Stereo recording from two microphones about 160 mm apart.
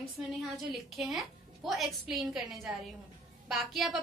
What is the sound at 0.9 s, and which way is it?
A woman's voice, centre (ahead or behind).